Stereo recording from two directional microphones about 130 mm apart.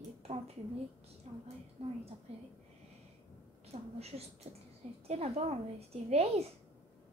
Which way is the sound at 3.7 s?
50° right (ahead or behind).